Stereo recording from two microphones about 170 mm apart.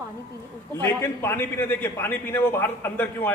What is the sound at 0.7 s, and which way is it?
A man's voice, 15° left (ahead or behind).